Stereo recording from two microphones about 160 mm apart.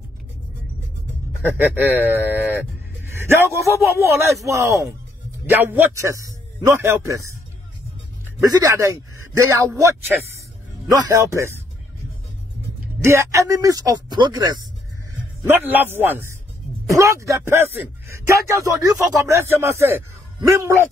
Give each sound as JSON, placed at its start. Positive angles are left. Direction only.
{"t": 1.8, "sound": "a man's voice", "side_deg": -10}
{"t": 8.4, "sound": "a man's voice", "side_deg": -20}
{"t": 13.0, "sound": "a man's voice", "side_deg": -15}
{"t": 15.4, "sound": "a man's voice", "side_deg": -15}